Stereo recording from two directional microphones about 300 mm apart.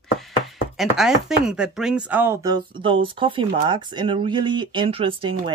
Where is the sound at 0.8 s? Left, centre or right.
Centre.